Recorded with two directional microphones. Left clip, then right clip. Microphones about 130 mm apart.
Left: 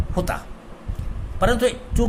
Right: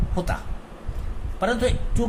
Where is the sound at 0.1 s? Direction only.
30° left (ahead or behind).